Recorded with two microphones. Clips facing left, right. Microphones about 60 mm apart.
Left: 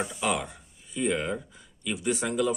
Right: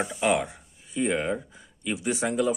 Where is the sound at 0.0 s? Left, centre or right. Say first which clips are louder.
Right 4 dB; right.